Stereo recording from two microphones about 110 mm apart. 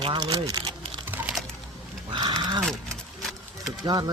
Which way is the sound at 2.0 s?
40° right (ahead or behind).